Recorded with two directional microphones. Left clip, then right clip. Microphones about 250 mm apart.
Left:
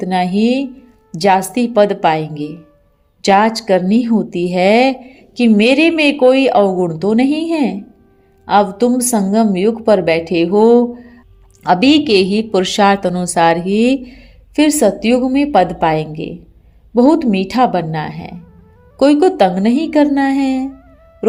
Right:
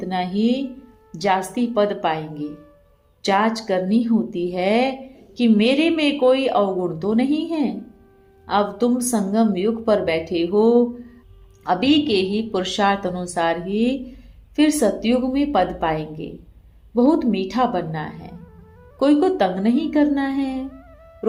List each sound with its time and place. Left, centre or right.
0.0 s a woman's voice: left
2.4 s speech: centre
3.2 s a woman's voice: left